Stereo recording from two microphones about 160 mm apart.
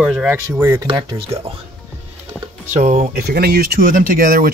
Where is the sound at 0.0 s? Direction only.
10° right (ahead or behind).